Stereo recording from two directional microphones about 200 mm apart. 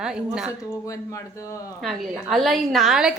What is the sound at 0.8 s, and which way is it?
Speech, 15° left (ahead or behind).